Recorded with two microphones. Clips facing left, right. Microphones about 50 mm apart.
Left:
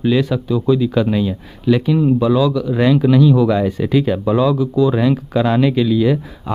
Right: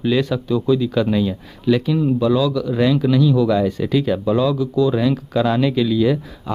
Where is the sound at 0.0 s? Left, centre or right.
Centre.